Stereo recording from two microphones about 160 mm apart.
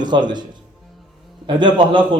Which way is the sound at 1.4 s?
30° right (ahead or behind).